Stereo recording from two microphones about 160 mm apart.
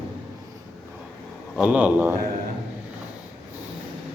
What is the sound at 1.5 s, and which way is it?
Speech, 10° right (ahead or behind).